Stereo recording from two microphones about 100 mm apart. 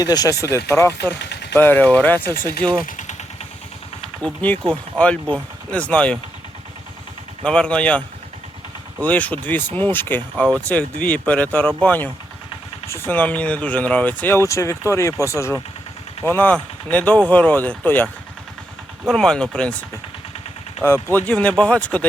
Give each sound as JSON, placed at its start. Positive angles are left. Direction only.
{"t": 0.0, "sound": "speech", "side_deg": 40}
{"t": 0.4, "sound": "speech", "side_deg": 30}
{"t": 4.2, "sound": "speech", "side_deg": 15}
{"t": 7.4, "sound": "speech", "side_deg": 10}
{"t": 16.2, "sound": "speech", "side_deg": 20}
{"t": 19.0, "sound": "speech", "side_deg": 5}
{"t": 20.8, "sound": "speech", "side_deg": 25}
{"t": 21.2, "sound": "speech", "side_deg": 10}